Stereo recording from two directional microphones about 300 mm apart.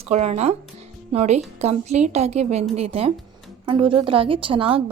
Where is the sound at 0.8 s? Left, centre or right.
Right.